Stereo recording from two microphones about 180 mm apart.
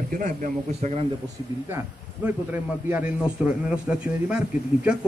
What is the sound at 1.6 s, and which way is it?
A man's voice, 10° right (ahead or behind).